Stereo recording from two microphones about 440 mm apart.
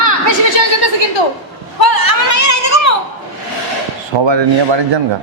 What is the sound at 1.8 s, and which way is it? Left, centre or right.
Chatter, left.